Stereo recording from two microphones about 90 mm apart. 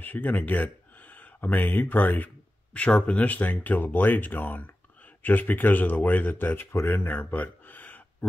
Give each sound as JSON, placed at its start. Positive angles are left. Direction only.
{"t": 0.0, "sound": "speech", "side_deg": 20}